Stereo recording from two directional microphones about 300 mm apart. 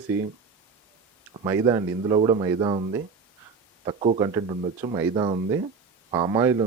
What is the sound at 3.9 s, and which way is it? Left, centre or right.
Speech, centre.